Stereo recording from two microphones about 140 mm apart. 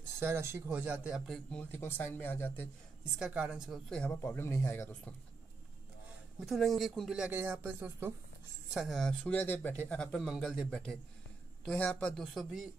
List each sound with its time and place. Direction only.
0.2 s speech: 20° right (ahead or behind); by 2.7 s 15° left (ahead or behind)
3.2 s speech: 5° right (ahead or behind)
3.9 s speech: 10° left (ahead or behind)
6.4 s speech: centre (ahead or behind)
8.7 s speech: centre (ahead or behind)